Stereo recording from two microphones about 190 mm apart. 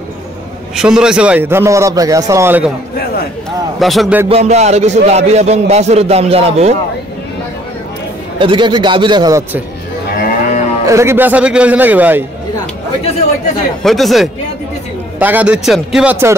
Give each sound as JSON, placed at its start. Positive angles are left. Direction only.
{"t": 0.7, "sound": "a man's voice", "side_deg": -5}
{"t": 3.8, "sound": "speech", "side_deg": 0}
{"t": 4.3, "sound": "a man's voice", "side_deg": -35}
{"t": 8.4, "sound": "a man's voice", "side_deg": -25}
{"t": 10.1, "sound": "moo", "side_deg": 45}
{"t": 10.9, "sound": "a man's voice", "side_deg": -15}
{"t": 13.8, "sound": "a man's voice", "side_deg": 0}